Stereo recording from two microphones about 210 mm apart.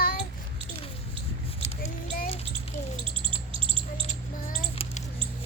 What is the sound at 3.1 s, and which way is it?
Bird, 25° right (ahead or behind).